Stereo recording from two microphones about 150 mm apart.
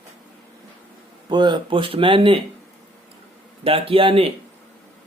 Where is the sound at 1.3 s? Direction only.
30° right (ahead or behind).